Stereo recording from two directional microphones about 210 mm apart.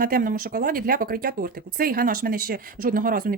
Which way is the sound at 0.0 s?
45° right (ahead or behind).